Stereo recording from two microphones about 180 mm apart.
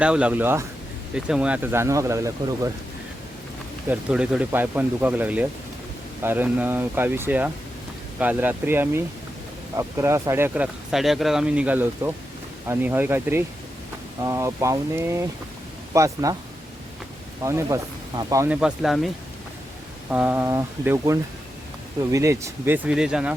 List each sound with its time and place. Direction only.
0.0 s speech: 5° right (ahead or behind)
3.8 s speech: 5° right (ahead or behind)
17.4 s speech: 15° right (ahead or behind)
18.5 s speech: 5° right (ahead or behind)